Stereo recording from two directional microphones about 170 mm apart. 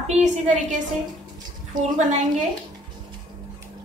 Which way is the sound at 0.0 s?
40° right (ahead or behind).